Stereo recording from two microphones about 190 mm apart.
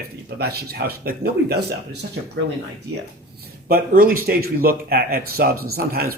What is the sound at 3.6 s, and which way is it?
Speech, 50° right (ahead or behind).